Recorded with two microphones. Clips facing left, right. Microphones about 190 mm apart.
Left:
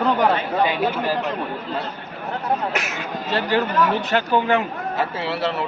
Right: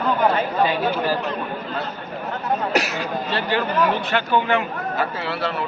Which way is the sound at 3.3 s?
40° left (ahead or behind).